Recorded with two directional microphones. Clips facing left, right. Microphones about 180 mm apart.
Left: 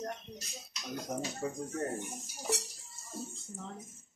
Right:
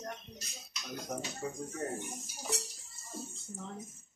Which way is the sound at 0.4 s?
20° left (ahead or behind).